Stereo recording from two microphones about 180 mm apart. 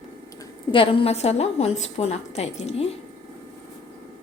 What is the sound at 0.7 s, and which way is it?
A woman's voice, 30° left (ahead or behind).